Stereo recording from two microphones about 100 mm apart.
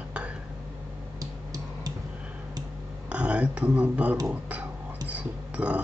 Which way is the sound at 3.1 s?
10° right (ahead or behind).